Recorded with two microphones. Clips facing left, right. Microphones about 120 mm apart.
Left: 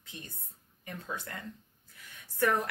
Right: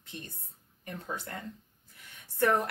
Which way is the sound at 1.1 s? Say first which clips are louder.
Right 1 dB; 25° right (ahead or behind).